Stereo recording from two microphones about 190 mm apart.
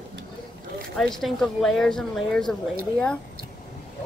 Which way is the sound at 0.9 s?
Centre (ahead or behind).